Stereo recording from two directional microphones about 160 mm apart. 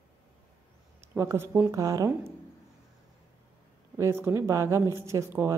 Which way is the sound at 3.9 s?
15° right (ahead or behind).